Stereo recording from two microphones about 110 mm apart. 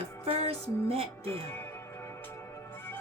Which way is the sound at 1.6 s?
20° left (ahead or behind).